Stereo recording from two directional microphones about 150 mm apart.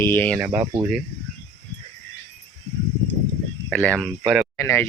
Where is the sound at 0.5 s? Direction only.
25° right (ahead or behind).